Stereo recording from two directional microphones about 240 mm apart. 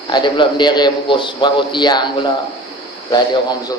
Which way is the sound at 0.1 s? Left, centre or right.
Centre.